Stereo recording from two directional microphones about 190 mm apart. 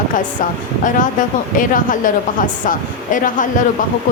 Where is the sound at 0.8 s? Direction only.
45° left (ahead or behind).